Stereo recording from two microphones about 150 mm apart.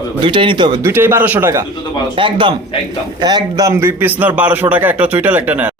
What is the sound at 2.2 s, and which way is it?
Speech, 35° right (ahead or behind).